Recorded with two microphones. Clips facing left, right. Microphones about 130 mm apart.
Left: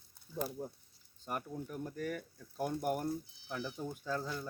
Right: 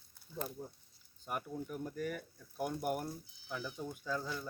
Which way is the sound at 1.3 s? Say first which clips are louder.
Even; 5° right (ahead or behind).